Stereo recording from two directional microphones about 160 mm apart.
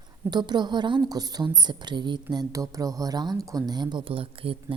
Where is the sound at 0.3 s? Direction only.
25° right (ahead or behind).